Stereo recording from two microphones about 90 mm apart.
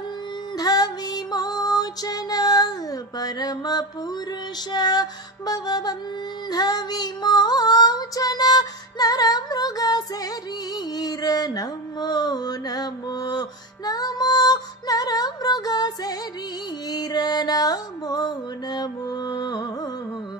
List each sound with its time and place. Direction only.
0.6 s music: 45° left (ahead or behind)
11.0 s mantra: 45° left (ahead or behind)
16.9 s music: 50° left (ahead or behind)